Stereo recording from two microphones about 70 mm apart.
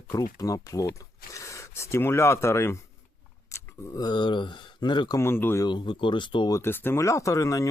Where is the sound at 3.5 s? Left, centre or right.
Left.